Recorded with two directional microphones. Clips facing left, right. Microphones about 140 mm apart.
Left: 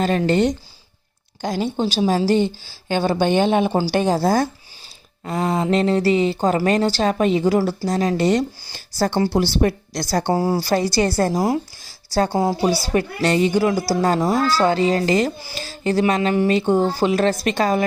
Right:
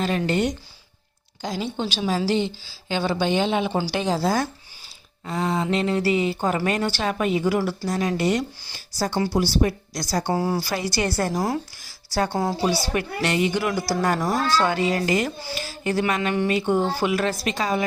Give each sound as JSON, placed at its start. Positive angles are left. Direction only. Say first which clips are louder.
{"t": 0.0, "sound": "speech", "louder": "left 5 dB", "side_deg": 40}
{"t": 1.8, "sound": "speech", "louder": "left 6 dB", "side_deg": 35}
{"t": 9.3, "sound": "speech", "louder": "left 3 dB", "side_deg": 55}
{"t": 10.2, "sound": "speech", "louder": "left 5 dB", "side_deg": 35}
{"t": 11.2, "sound": "speech", "louder": "left 5 dB", "side_deg": 30}
{"t": 12.9, "sound": "speech", "louder": "left 5 dB", "side_deg": 35}
{"t": 13.9, "sound": "speech", "louder": "left 4 dB", "side_deg": 25}